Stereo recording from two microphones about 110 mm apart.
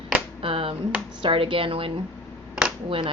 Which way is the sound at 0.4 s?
55° right (ahead or behind).